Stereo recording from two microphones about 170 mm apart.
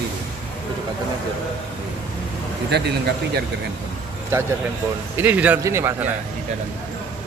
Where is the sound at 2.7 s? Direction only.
85° right.